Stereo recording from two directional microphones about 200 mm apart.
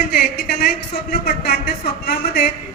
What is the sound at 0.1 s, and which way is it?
A woman's voice, 50° left (ahead or behind).